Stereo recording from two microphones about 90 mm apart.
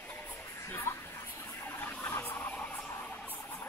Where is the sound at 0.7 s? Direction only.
25° left (ahead or behind).